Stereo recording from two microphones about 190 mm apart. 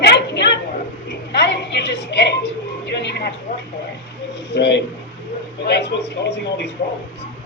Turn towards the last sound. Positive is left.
turn(degrees=65)  # may be behind; listen again after turning